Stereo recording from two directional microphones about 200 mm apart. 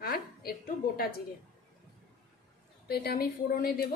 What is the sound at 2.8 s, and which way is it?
Speech, 50° left (ahead or behind).